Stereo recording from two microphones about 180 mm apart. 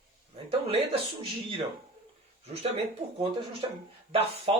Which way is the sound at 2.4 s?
35° right (ahead or behind).